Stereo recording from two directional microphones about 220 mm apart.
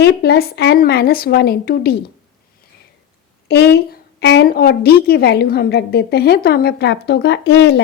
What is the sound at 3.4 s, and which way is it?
A woman's voice, 50° left (ahead or behind).